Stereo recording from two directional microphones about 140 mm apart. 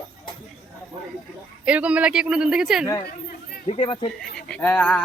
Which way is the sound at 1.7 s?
10° right (ahead or behind).